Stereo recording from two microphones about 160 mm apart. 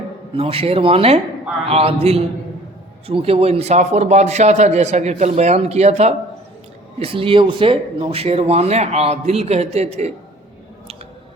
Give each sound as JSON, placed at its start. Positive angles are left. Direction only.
{"t": 0.3, "sound": "a man's voice", "side_deg": -40}